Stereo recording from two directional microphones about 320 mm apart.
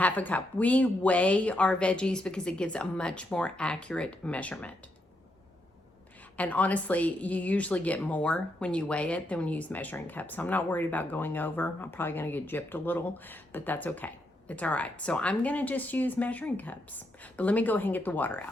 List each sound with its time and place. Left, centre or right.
0.0 s speech: centre
6.3 s speech: centre